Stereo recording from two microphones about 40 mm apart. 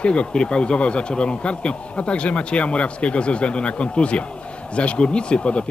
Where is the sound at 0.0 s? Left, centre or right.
Left.